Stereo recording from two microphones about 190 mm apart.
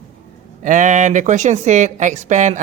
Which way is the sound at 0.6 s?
40° right (ahead or behind).